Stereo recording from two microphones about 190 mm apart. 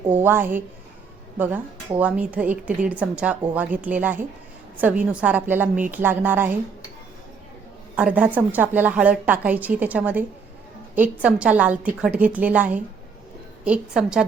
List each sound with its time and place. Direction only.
0.1 s a woman's voice: 10° right (ahead or behind)
7.9 s a woman's voice: 5° right (ahead or behind)